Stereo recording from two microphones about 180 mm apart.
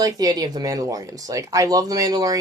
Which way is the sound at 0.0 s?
20° right (ahead or behind).